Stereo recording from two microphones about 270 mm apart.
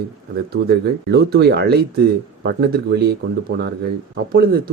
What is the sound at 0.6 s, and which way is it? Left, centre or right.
Speech, right.